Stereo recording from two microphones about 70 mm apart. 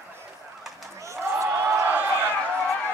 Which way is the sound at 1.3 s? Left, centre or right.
Right.